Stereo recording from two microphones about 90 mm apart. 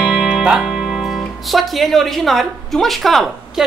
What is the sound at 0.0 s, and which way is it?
Music, 5° left (ahead or behind).